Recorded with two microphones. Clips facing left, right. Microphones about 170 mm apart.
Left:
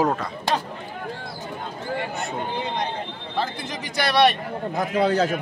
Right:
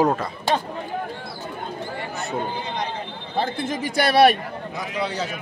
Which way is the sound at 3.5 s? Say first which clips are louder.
Right 6 dB; 50° right (ahead or behind).